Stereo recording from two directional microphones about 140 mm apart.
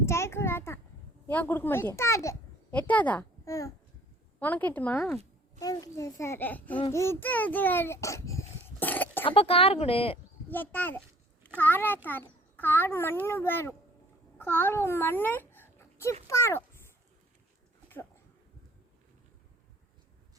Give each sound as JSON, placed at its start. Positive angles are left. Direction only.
{"t": 0.0, "sound": "a sound", "side_deg": 20}
{"t": 1.3, "sound": "a child's voice", "side_deg": 15}
{"t": 2.7, "sound": "a child's voice", "side_deg": 10}
{"t": 3.4, "sound": "a child's voice", "side_deg": 25}
{"t": 4.4, "sound": "a child's voice", "side_deg": 10}
{"t": 5.5, "sound": "a woman's voice", "side_deg": 25}
{"t": 9.2, "sound": "speech", "side_deg": 40}
{"t": 10.5, "sound": "a child's voice", "side_deg": 15}